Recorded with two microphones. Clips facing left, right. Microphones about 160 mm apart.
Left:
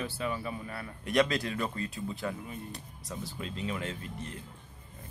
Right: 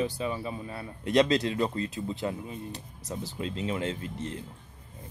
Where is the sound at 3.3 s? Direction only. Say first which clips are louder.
Right 5 dB; 25° right (ahead or behind).